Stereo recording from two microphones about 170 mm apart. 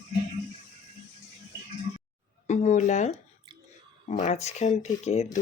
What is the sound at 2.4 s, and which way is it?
Speech, 45° left (ahead or behind).